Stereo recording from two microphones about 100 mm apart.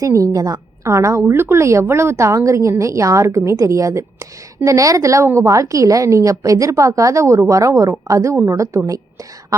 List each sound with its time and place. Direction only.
0.0 s a woman's voice: 35° right (ahead or behind)